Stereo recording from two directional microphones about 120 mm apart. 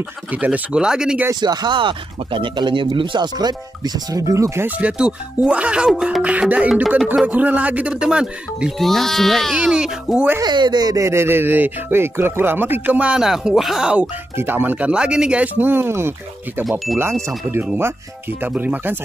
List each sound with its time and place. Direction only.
0.3 s speech: 10° right (ahead or behind)
1.4 s speech: 35° right (ahead or behind)
4.6 s speech: 10° right (ahead or behind)
10.4 s speech: 40° right (ahead or behind); by 14.0 s 5° right (ahead or behind)
14.3 s speech: 20° right (ahead or behind)
18.4 s speech: 15° right (ahead or behind)